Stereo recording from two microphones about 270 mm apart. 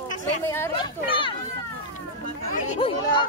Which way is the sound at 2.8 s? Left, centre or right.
Centre.